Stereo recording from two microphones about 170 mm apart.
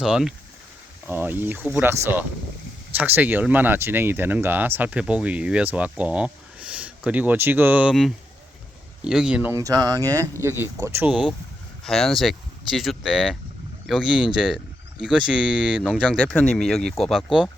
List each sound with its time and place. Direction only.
0.0 s speech: 5° right (ahead or behind)
11.1 s speech: 5° right (ahead or behind)
15.8 s speech: 5° left (ahead or behind)